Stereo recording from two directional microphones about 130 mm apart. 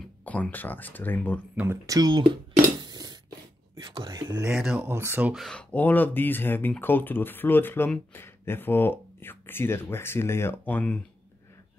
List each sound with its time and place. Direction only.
0.0 s speech: 10° left (ahead or behind)
1.9 s speech: 30° right (ahead or behind)
2.8 s a sound: 30° right (ahead or behind)
3.8 s speech: 35° right (ahead or behind)
4.5 s speech: 5° right (ahead or behind)
4.8 s speech: 20° right (ahead or behind)
5.3 s speech: 5° left (ahead or behind)